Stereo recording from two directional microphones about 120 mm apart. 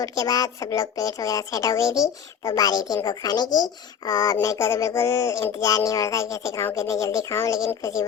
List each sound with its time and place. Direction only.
0.0 s speech: 30° left (ahead or behind)